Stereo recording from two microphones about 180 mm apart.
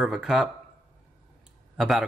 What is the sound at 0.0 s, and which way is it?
Speech, 5° right (ahead or behind).